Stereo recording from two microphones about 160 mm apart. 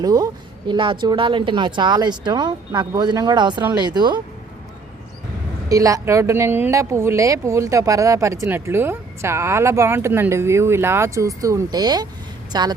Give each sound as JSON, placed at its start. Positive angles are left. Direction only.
{"t": 0.0, "sound": "a woman's voice", "side_deg": -25}
{"t": 5.6, "sound": "speech", "side_deg": -20}